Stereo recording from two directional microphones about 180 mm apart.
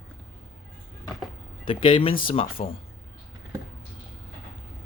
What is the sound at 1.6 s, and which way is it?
Speech, 30° left (ahead or behind).